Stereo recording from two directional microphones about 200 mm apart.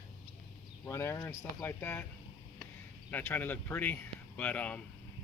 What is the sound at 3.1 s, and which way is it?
Speech, 10° left (ahead or behind).